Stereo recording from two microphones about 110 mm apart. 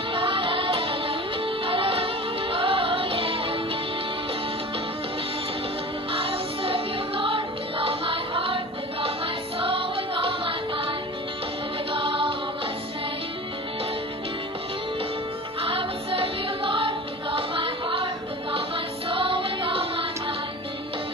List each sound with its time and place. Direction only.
0.1 s music: 50° right (ahead or behind)
6.1 s music: 55° right (ahead or behind)
15.6 s music: 55° right (ahead or behind)